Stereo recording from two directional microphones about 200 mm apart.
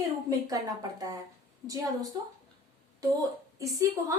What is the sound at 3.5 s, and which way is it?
Speech, 15° right (ahead or behind).